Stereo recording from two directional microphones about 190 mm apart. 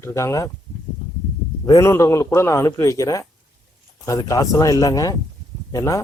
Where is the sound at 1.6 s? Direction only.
15° left (ahead or behind).